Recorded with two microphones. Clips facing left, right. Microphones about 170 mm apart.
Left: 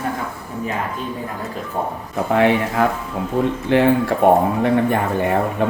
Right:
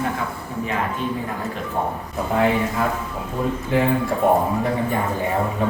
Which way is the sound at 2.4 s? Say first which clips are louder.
Left 3 dB; 70° left (ahead or behind).